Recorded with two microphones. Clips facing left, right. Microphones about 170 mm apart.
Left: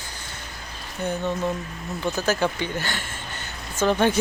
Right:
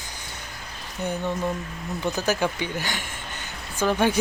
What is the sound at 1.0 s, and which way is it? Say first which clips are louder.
Speech: left 1 dB; 15° right (ahead or behind).